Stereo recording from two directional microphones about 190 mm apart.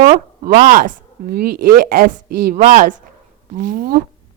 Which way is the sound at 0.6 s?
45° right (ahead or behind).